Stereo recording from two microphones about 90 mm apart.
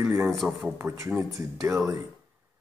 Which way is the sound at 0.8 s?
30° right (ahead or behind).